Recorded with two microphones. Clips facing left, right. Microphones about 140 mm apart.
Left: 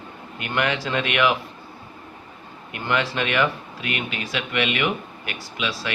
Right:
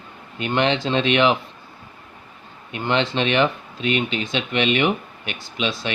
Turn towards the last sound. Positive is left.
turn(degrees=-25)  # may be behind; listen again after turning